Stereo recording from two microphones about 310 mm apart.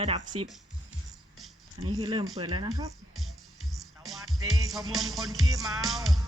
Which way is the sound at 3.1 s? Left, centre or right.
Centre.